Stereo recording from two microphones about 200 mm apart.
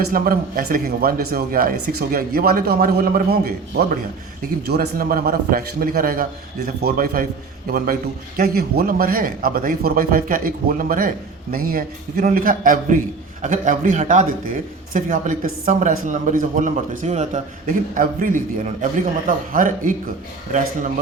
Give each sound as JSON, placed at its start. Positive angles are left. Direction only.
{"t": 0.0, "sound": "speech", "side_deg": -45}
{"t": 8.4, "sound": "a man's voice", "side_deg": -50}